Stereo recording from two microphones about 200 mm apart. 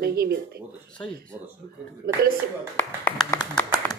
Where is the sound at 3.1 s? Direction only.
5° left (ahead or behind).